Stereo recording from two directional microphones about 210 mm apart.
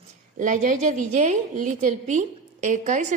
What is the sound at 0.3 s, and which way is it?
A woman's voice, 40° right (ahead or behind).